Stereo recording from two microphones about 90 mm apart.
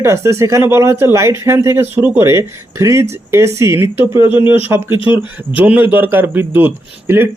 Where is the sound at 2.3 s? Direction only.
35° right (ahead or behind).